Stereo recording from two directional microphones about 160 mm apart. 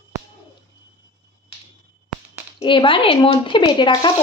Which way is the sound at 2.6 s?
30° left (ahead or behind).